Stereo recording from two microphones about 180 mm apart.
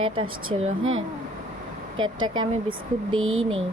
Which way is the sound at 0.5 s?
30° right (ahead or behind).